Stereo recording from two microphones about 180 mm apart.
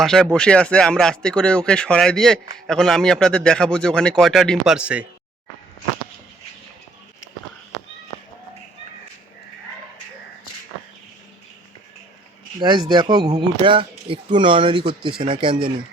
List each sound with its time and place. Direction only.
0.0 s speech: centre (ahead or behind)
12.5 s speech: 25° right (ahead or behind)